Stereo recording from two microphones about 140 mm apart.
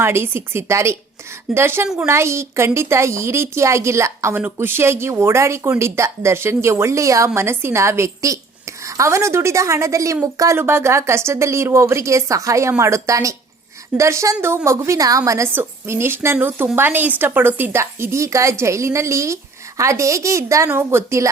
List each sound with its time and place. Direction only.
0.0 s a woman's voice: 15° right (ahead or behind)